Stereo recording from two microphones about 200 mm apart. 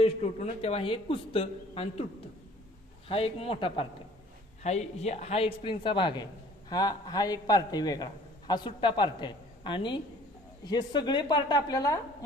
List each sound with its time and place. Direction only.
0.0 s a man's voice: 30° left (ahead or behind)
3.1 s a man's voice: 30° left (ahead or behind)